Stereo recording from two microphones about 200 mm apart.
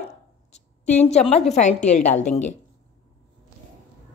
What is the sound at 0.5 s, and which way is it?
A woman's voice, 35° left (ahead or behind).